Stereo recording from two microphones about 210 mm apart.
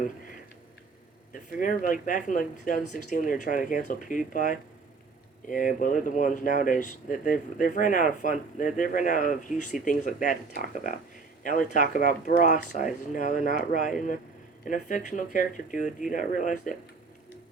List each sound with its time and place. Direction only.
1.3 s speech: 40° left (ahead or behind)